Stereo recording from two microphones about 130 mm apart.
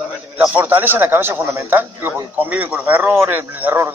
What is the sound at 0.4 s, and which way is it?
Speech, 15° right (ahead or behind).